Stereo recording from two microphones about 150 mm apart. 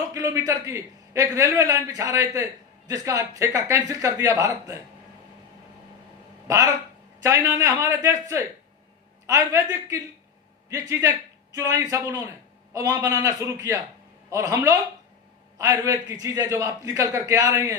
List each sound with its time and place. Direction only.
0.1 s a man's voice: 20° right (ahead or behind)
7.2 s a man's voice: 20° right (ahead or behind)